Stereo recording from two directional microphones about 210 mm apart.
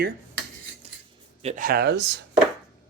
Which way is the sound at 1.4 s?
35° right (ahead or behind).